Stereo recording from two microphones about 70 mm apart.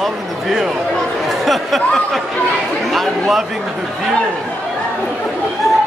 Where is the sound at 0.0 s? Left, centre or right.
Centre.